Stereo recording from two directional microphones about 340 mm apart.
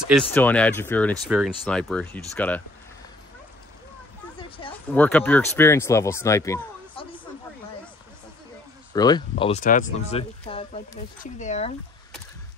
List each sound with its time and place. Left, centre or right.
0.0 s speech: centre
4.4 s a sound: centre
4.9 s speech: centre
8.9 s speech: centre